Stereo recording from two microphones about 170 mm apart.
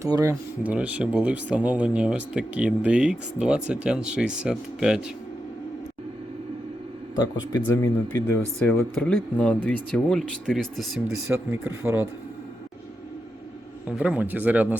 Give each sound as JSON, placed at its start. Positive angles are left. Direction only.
{"t": 0.0, "sound": "speech", "side_deg": -20}
{"t": 0.6, "sound": "speech", "side_deg": -10}
{"t": 7.2, "sound": "speech", "side_deg": 20}
{"t": 11.3, "sound": "speech", "side_deg": -15}
{"t": 13.8, "sound": "speech", "side_deg": -5}